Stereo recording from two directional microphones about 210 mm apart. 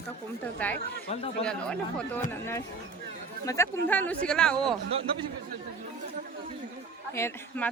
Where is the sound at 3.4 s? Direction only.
15° left (ahead or behind).